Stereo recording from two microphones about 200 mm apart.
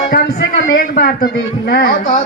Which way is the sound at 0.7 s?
50° left (ahead or behind).